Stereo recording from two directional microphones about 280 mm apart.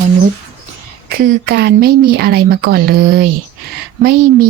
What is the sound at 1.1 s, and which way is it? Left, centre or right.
A woman's voice, right.